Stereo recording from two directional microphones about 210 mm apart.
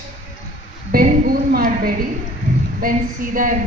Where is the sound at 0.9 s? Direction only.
45° right (ahead or behind).